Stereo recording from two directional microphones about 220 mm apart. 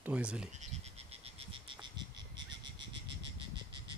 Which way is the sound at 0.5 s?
30° right (ahead or behind).